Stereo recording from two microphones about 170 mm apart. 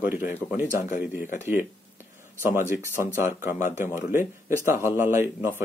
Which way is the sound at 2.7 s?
15° right (ahead or behind).